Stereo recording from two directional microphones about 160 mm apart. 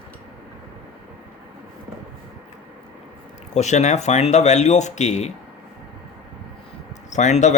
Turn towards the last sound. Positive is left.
turn(degrees=45)  # may be behind; listen again after turning